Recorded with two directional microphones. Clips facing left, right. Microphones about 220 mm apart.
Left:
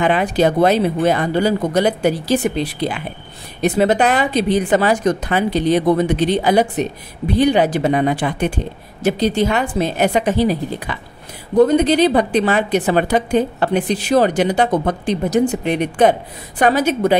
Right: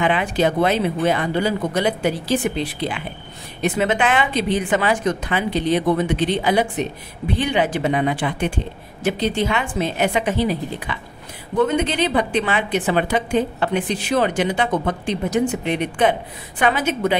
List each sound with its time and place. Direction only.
0.0 s a woman's voice: 40° left (ahead or behind)